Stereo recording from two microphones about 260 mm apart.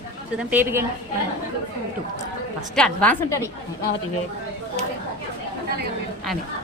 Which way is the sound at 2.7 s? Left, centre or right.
Centre.